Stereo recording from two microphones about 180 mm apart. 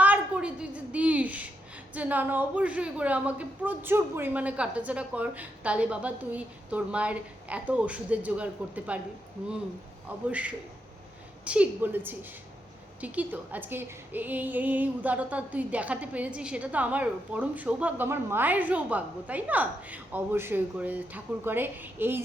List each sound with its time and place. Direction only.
0.0 s a sound: 5° right (ahead or behind)
1.9 s a woman's voice: 10° right (ahead or behind)
10.2 s a woman's voice: 5° right (ahead or behind)